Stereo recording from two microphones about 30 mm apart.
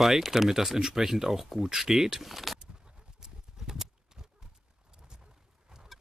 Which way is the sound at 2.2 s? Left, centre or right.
Centre.